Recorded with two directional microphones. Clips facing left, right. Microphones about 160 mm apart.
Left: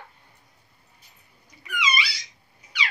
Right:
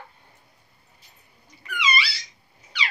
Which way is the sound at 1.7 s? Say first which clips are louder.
Right 1 dB; 10° left (ahead or behind).